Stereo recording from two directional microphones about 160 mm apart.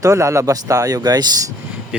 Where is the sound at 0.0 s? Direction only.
20° right (ahead or behind).